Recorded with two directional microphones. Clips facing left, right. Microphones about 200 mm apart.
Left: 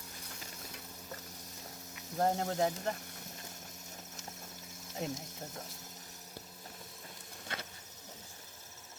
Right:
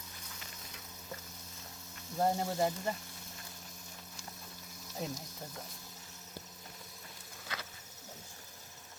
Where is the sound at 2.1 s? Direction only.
5° right (ahead or behind).